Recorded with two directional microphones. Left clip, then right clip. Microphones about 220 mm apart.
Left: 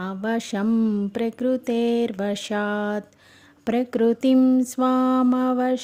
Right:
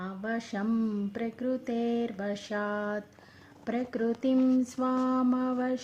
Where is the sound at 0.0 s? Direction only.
45° left (ahead or behind).